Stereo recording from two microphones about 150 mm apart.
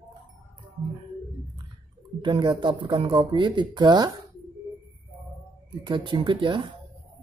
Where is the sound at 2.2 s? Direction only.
30° right (ahead or behind).